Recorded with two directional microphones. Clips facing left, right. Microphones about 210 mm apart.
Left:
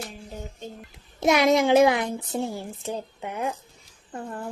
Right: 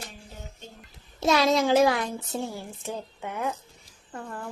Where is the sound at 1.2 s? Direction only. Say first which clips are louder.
Left 3 dB; 15° left (ahead or behind).